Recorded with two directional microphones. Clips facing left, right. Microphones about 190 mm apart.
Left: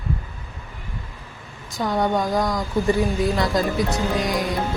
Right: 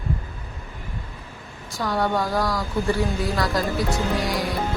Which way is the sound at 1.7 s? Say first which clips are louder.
Left 2 dB; 20° left (ahead or behind).